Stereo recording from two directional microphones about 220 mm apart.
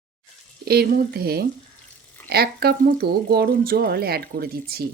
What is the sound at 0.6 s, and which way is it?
Speech, 45° right (ahead or behind).